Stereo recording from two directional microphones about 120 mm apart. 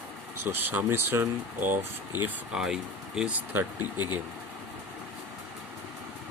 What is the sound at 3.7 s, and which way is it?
Speech, 35° left (ahead or behind).